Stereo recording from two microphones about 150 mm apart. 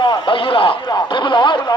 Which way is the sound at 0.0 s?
35° left (ahead or behind).